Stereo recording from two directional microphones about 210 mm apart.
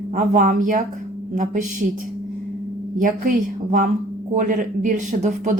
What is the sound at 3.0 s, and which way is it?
Speech, 40° right (ahead or behind).